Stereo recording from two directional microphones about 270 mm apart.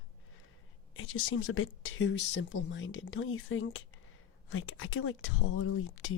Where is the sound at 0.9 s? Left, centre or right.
Left.